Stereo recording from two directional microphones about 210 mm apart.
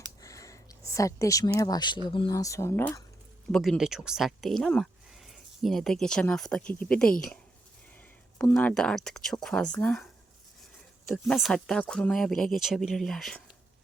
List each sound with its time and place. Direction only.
0.2 s a sound: 15° left (ahead or behind)
1.5 s speech: 15° left (ahead or behind)
3.5 s speech: centre (ahead or behind)
8.4 s speech: 5° left (ahead or behind)
11.1 s speech: centre (ahead or behind)